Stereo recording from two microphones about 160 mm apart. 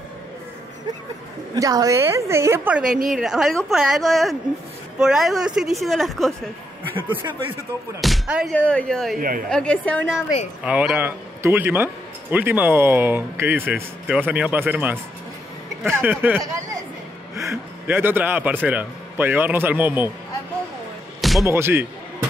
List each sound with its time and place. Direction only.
1.5 s a man's voice: 25° right (ahead or behind); by 6.3 s centre (ahead or behind)
7.1 s a man's voice: 15° right (ahead or behind)
8.0 s speech: 5° right (ahead or behind)
8.5 s a woman's voice: 10° left (ahead or behind)
10.6 s a man's voice: 5° right (ahead or behind)
17.4 s a man's voice: 15° right (ahead or behind)
21.2 s music: centre (ahead or behind)
21.5 s a man's voice: 15° right (ahead or behind)